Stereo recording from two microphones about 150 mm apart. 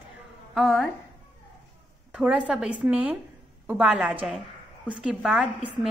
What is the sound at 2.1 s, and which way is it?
A woman's voice, 5° right (ahead or behind).